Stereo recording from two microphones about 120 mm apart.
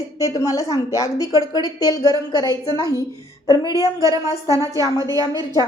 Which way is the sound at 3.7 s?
30° right (ahead or behind).